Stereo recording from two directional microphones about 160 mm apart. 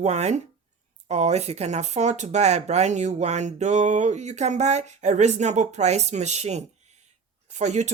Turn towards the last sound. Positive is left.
turn(degrees=-45)  # may be behind; listen again after turning